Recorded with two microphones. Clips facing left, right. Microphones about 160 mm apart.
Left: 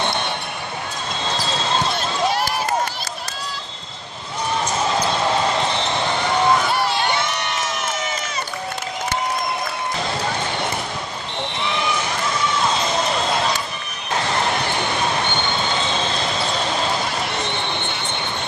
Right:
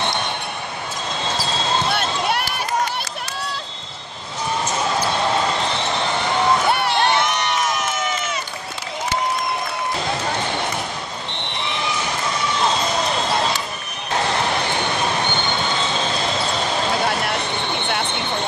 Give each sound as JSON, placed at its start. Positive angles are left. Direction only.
{"t": 1.9, "sound": "basketball bounce", "side_deg": -65}
{"t": 6.7, "sound": "crowd", "side_deg": -60}